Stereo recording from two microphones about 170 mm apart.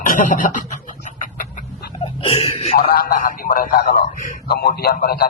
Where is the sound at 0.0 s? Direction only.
50° left (ahead or behind).